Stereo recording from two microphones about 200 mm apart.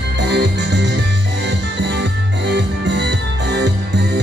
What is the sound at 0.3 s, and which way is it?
Music, 60° right (ahead or behind).